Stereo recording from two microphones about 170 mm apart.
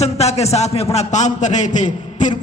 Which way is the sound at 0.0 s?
40° left (ahead or behind).